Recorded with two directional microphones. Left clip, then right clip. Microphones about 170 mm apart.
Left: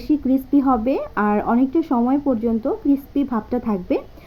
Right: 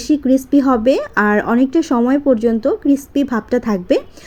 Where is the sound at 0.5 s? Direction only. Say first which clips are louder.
Right 5 dB; 35° right (ahead or behind).